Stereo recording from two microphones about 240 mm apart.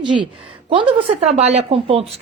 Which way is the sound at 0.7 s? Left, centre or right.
Right.